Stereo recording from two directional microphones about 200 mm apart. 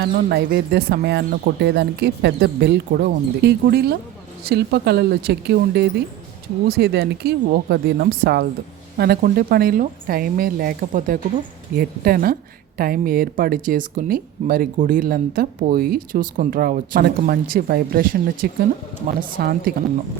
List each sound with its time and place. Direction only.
0.0 s a woman's voice: 55° right (ahead or behind)